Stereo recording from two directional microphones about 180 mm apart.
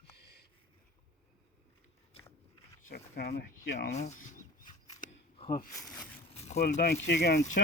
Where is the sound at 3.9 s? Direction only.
40° left (ahead or behind).